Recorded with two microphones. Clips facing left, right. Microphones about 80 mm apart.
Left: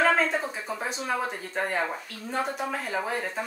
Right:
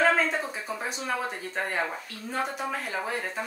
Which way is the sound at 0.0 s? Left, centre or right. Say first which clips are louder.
Left 1 dB; centre.